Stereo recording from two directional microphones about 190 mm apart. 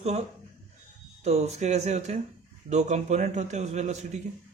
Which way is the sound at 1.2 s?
35° right (ahead or behind).